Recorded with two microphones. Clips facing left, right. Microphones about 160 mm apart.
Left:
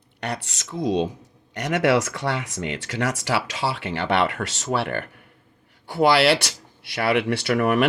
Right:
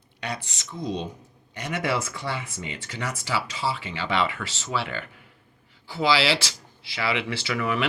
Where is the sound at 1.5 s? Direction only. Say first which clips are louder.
Left 7 dB; 70° left (ahead or behind).